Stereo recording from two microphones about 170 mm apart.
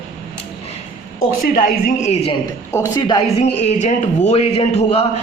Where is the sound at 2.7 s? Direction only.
20° left (ahead or behind).